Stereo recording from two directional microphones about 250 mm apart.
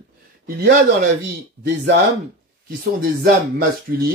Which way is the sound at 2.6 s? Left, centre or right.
Right.